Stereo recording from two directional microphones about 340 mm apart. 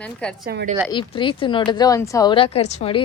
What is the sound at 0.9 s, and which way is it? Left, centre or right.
Speech, centre.